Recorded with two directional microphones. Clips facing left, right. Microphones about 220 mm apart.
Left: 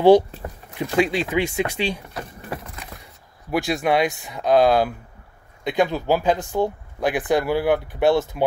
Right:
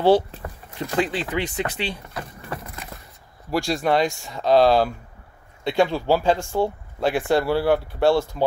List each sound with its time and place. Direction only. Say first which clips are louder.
0.0 s speech: left 4 dB; 15° left (ahead or behind)
3.6 s speech: even; 10° left (ahead or behind)
5.7 s speech: right 1 dB; 15° left (ahead or behind)